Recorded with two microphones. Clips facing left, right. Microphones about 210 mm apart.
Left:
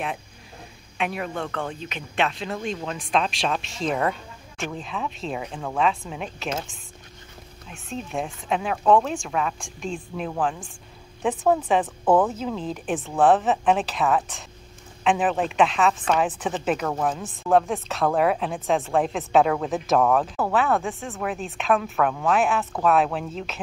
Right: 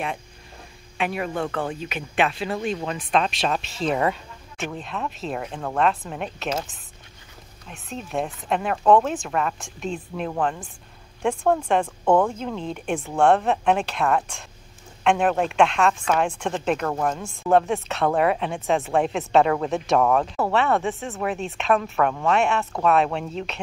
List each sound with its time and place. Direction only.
0.9 s a woman's voice: centre (ahead or behind)
7.7 s a woman's voice: centre (ahead or behind)